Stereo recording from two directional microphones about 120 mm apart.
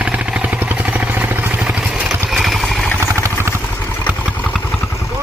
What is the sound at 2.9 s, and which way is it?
Vehicle, 25° right (ahead or behind).